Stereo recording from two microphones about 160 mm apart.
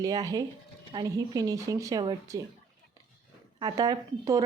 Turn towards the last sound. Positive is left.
turn(degrees=-20)  # may be behind; listen again after turning